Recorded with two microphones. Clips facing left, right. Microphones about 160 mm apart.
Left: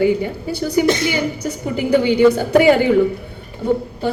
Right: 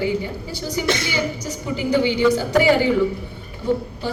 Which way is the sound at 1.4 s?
55° left (ahead or behind).